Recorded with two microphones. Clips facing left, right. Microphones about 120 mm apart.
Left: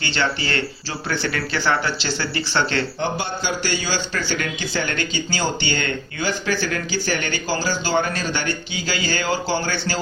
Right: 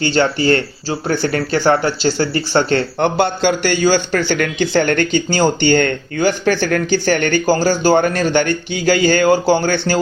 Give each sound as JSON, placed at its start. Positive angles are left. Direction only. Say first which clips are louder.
{"t": 0.0, "sound": "speech", "louder": "right 9 dB", "side_deg": -45}
{"t": 3.0, "sound": "speech", "louder": "right 9 dB", "side_deg": -65}